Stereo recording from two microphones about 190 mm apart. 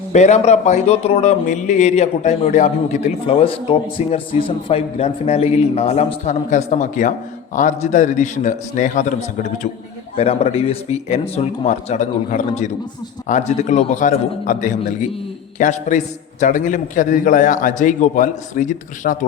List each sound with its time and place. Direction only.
0.1 s a man's voice: 35° left (ahead or behind)
10.2 s a man's voice: 35° left (ahead or behind)